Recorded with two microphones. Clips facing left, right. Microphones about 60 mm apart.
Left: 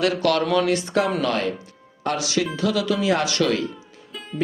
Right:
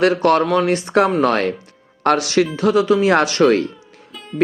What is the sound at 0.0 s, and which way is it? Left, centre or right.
Speech, right.